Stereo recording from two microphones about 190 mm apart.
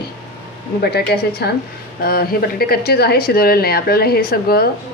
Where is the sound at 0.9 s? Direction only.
55° left (ahead or behind).